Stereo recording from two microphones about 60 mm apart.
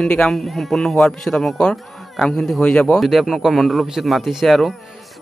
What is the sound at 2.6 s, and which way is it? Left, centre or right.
Speech, centre.